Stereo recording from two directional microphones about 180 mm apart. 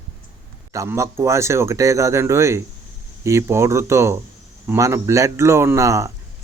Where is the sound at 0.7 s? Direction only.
15° right (ahead or behind).